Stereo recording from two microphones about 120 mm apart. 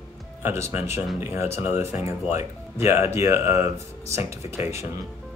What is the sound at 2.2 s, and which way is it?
Speech, 65° left (ahead or behind).